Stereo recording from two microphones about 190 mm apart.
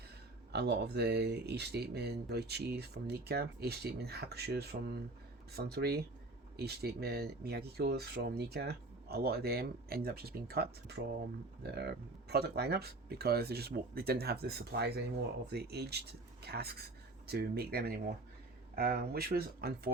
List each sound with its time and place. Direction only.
0.5 s speech: 60° right (ahead or behind)